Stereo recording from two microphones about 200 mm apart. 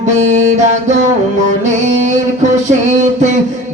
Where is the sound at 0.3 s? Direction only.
35° right (ahead or behind).